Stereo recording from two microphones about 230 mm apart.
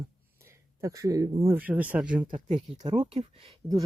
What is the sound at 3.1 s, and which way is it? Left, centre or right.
Speech, right.